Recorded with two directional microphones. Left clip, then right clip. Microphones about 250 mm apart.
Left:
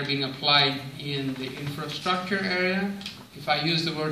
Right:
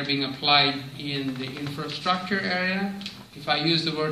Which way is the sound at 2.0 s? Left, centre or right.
Centre.